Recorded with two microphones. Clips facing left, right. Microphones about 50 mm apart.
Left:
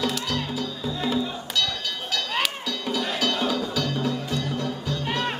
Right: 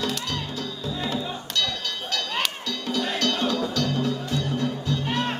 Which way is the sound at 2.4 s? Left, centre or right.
Centre.